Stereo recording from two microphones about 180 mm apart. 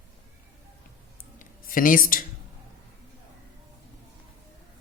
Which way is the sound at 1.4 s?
50° left (ahead or behind).